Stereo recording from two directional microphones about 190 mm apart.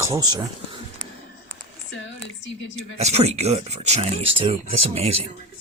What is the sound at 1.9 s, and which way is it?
Speech, 70° left (ahead or behind).